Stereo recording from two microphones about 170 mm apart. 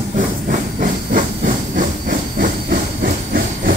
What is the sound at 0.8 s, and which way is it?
Hiss, 50° right (ahead or behind).